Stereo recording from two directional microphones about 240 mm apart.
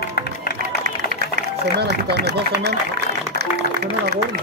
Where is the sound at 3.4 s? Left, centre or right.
Right.